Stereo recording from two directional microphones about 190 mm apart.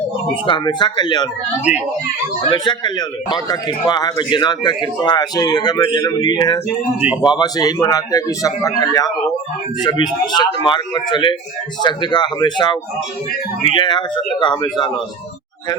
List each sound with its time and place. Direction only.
0.4 s a man's voice: 25° left (ahead or behind)
2.5 s a man's voice: 25° left (ahead or behind)
10.3 s a man's voice: 25° left (ahead or behind)